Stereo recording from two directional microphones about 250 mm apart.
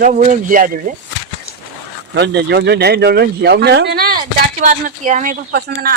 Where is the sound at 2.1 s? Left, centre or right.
Right.